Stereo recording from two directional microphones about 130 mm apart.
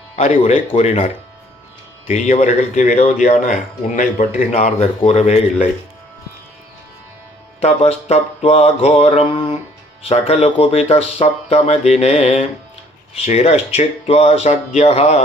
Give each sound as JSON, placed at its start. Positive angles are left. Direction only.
{"t": 0.2, "sound": "speech", "side_deg": 55}
{"t": 2.0, "sound": "speech", "side_deg": 65}
{"t": 4.5, "sound": "speech", "side_deg": 55}
{"t": 7.6, "sound": "speech", "side_deg": 55}